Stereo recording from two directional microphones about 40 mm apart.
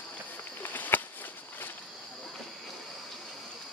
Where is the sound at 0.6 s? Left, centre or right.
Left.